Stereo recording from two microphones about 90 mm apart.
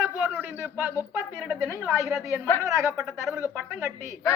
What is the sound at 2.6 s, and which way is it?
Speech, 35° right (ahead or behind).